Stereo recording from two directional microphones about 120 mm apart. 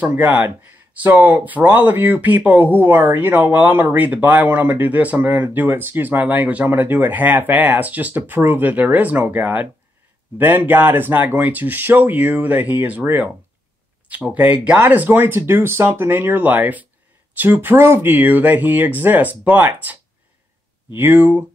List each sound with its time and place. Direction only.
0.0 s speech: 15° right (ahead or behind)